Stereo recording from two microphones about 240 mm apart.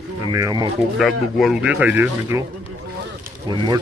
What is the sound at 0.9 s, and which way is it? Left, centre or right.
Speech, centre.